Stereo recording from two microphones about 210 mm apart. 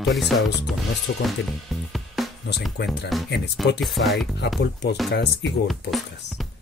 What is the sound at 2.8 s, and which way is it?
Speech, 55° left (ahead or behind).